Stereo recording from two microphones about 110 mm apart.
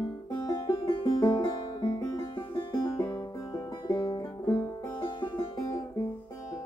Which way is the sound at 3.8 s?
45° left (ahead or behind).